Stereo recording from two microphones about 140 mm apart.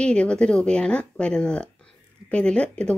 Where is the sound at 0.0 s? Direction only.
5° left (ahead or behind).